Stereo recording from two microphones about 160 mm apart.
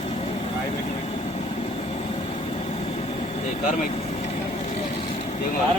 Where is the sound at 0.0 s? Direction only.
40° left (ahead or behind); by 3.9 s 55° left (ahead or behind).